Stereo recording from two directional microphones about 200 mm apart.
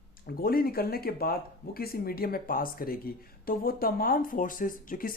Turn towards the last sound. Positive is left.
turn(degrees=45)  # may be behind; listen again after turning